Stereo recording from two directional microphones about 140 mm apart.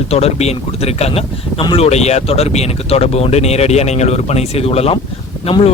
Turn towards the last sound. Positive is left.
turn(degrees=40)  # may be behind; listen again after turning